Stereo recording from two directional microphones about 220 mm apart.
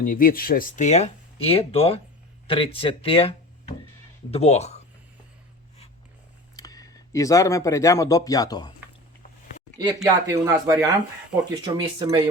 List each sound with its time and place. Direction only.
0.0 s speech: 40° left (ahead or behind)
6.6 s speech: 15° left (ahead or behind)
9.7 s speech: 15° right (ahead or behind)